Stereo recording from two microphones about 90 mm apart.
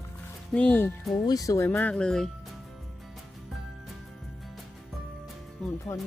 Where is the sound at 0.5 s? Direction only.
15° left (ahead or behind).